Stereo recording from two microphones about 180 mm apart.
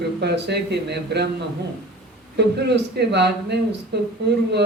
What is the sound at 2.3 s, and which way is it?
A man's voice, 70° right (ahead or behind).